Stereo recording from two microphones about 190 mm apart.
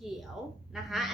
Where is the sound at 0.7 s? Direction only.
Centre (ahead or behind).